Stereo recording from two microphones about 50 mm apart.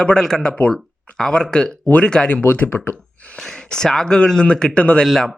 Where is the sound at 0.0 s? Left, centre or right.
Centre.